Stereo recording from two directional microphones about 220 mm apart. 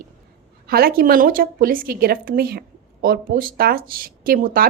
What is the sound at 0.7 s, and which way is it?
A woman's voice, 45° right (ahead or behind).